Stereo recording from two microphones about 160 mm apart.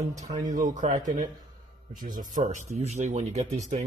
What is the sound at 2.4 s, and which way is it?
A man's voice, 45° right (ahead or behind).